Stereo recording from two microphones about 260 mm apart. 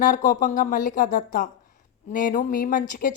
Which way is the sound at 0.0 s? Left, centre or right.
Left.